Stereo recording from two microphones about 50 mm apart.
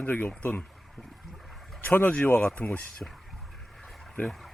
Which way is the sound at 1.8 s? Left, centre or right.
Left.